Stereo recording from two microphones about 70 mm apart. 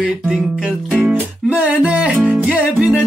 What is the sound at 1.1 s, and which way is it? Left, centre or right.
Music, right.